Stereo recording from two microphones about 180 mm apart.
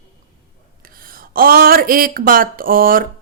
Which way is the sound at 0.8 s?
55° right (ahead or behind).